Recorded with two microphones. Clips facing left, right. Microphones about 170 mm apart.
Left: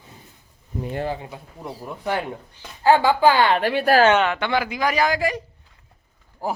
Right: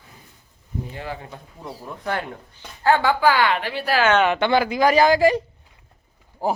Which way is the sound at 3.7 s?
50° left (ahead or behind).